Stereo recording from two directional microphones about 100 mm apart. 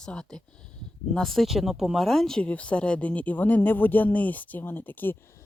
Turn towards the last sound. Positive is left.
turn(degrees=20)  # may be behind; listen again after turning